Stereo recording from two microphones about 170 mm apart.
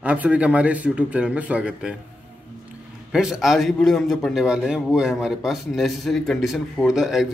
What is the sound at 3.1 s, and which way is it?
A man's voice, 5° right (ahead or behind).